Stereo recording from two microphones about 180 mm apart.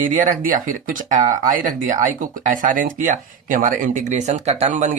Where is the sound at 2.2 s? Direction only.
50° right (ahead or behind).